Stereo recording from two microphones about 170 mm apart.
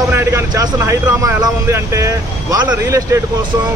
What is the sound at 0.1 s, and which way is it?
Speech, 15° right (ahead or behind).